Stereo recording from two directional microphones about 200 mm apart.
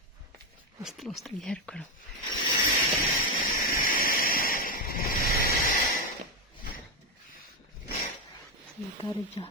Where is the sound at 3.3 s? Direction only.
45° left (ahead or behind).